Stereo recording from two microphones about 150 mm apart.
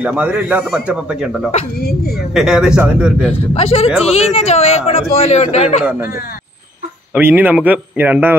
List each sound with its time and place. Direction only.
0.0 s speech: 10° right (ahead or behind)
1.8 s speech: 90° left
2.3 s a man's voice: 5° right (ahead or behind)
3.5 s speech: 40° left (ahead or behind)
7.2 s speech: 10° right (ahead or behind)